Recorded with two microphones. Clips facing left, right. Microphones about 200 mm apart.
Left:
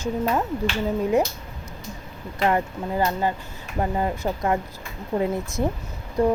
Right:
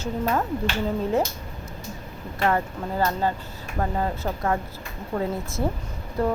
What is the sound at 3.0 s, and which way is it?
A woman's voice, 15° left (ahead or behind).